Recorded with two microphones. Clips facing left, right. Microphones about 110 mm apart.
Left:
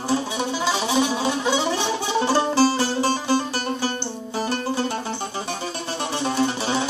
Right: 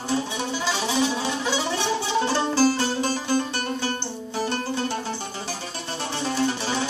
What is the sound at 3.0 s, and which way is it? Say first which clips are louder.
Music: left 3 dB; 30° left (ahead or behind).